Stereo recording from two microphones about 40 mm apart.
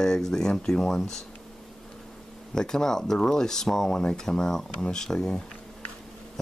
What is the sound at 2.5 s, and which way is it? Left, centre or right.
Speech, centre.